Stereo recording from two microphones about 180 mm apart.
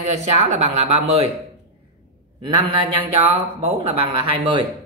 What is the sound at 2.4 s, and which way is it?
A man's voice, 25° right (ahead or behind).